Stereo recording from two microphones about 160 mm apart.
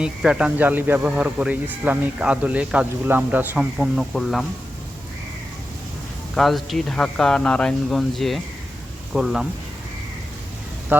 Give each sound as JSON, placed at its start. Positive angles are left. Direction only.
{"t": 0.0, "sound": "speech", "side_deg": -5}
{"t": 6.3, "sound": "speech", "side_deg": 0}